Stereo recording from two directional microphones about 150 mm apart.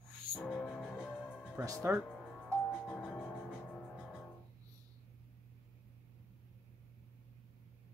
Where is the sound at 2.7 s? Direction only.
10° left (ahead or behind).